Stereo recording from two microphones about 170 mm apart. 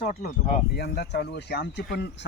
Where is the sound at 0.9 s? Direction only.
70° left (ahead or behind).